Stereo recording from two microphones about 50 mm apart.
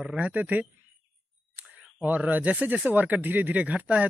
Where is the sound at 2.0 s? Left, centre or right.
Right.